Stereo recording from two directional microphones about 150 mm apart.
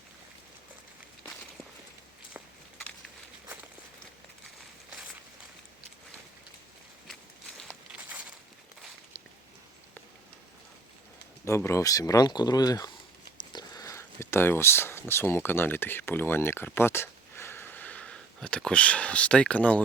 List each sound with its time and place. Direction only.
11.4 s speech: 20° left (ahead or behind)